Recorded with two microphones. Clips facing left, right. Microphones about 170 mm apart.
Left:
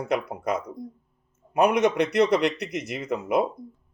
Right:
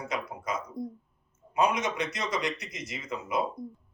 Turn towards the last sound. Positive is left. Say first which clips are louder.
# left 8 dB
turn(degrees=65)  # may be behind; listen again after turning